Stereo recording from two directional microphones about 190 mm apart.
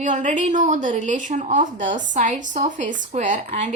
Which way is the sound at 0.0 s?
40° right (ahead or behind).